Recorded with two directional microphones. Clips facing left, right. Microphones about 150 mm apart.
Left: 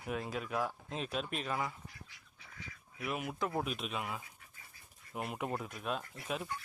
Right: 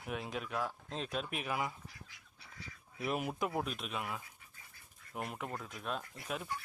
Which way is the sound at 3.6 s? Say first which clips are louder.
Left 1 dB; centre (ahead or behind).